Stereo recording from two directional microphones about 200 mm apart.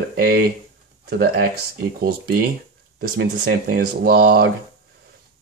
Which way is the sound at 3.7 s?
50° right (ahead or behind).